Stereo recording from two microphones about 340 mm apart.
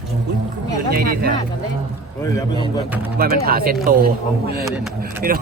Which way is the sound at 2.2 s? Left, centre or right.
Centre.